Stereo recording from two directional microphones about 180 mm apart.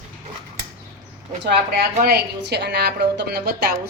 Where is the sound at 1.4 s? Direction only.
60° right (ahead or behind).